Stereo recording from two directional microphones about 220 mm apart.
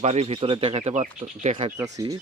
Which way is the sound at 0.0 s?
30° right (ahead or behind).